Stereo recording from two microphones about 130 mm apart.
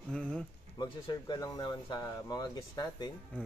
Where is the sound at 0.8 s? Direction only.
30° left (ahead or behind).